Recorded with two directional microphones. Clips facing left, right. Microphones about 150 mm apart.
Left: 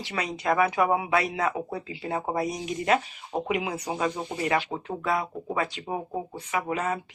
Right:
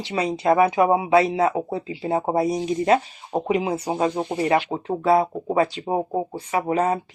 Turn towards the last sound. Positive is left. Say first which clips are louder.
# right 7 dB
turn(degrees=-35)  # may be behind; listen again after turning